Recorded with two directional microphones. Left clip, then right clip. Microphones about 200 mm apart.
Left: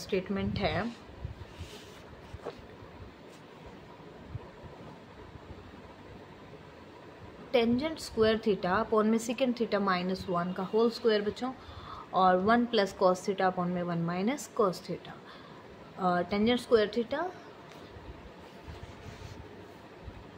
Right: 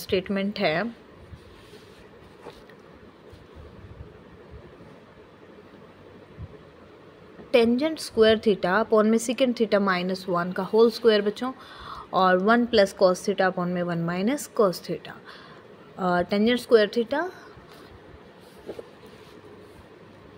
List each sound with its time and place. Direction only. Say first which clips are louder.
0.0 s a woman's voice: right 7 dB; 45° right (ahead or behind)
7.5 s a woman's voice: right 7 dB; 35° right (ahead or behind)